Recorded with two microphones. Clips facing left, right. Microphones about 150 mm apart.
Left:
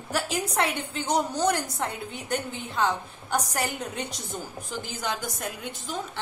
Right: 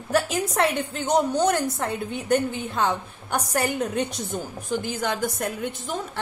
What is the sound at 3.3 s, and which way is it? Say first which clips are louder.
Speech: right 3 dB; 55° right (ahead or behind).